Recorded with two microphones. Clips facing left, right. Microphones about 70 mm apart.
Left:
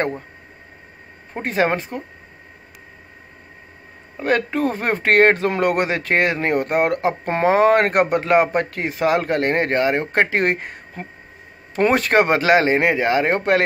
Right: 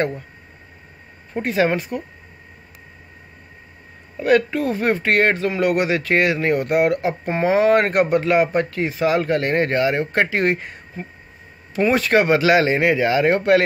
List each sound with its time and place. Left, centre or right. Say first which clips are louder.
1.3 s speech: right 1 dB; left
4.2 s speech: right 2 dB; left